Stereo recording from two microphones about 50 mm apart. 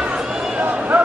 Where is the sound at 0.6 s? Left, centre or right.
Right.